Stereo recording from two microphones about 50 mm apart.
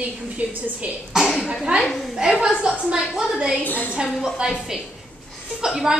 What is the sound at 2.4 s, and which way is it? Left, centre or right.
A woman's voice, centre.